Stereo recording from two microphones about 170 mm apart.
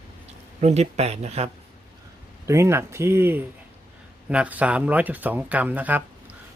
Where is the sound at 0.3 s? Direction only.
40° right (ahead or behind).